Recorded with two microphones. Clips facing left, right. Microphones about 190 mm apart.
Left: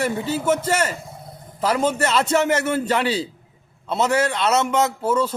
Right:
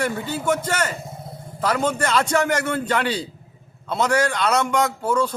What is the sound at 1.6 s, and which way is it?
A man's voice, 5° left (ahead or behind).